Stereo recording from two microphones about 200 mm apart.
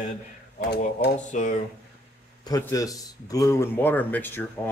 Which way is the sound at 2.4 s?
15° left (ahead or behind).